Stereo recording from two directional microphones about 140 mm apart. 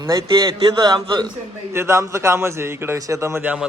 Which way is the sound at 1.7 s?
20° right (ahead or behind).